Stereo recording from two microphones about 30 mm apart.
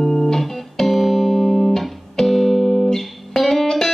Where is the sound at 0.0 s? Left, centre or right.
Centre.